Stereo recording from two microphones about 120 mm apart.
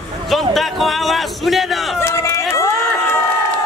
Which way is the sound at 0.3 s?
Centre (ahead or behind).